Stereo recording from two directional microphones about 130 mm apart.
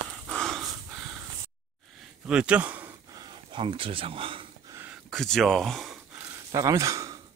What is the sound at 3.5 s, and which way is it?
Speech, 40° right (ahead or behind).